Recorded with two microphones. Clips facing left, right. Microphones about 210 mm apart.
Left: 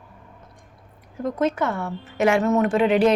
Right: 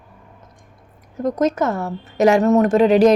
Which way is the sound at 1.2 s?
40° right (ahead or behind).